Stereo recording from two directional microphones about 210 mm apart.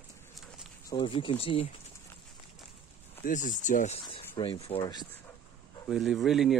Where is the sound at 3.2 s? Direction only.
35° left (ahead or behind); by 5.0 s 20° left (ahead or behind).